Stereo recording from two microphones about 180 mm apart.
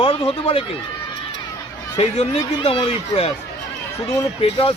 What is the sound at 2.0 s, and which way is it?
Speech, 35° left (ahead or behind).